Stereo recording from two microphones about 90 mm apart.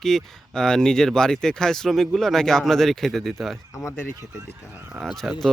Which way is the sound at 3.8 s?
30° left (ahead or behind).